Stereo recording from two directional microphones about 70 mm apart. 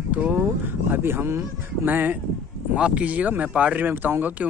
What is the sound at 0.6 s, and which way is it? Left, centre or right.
Speech, right.